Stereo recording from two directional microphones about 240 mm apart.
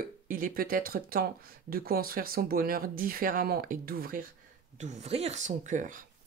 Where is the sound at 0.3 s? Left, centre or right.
Right.